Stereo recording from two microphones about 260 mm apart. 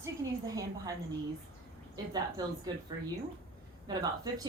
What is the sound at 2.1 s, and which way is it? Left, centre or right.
Speech, centre.